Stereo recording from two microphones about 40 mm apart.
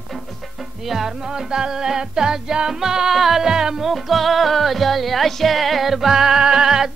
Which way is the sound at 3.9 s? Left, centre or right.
Centre.